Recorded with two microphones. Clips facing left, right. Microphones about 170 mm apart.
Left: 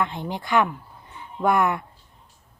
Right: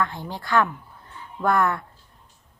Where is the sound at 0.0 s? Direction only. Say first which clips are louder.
Left 1 dB; 20° left (ahead or behind).